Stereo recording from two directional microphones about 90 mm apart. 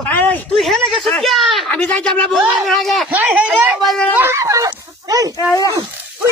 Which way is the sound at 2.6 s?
Centre (ahead or behind).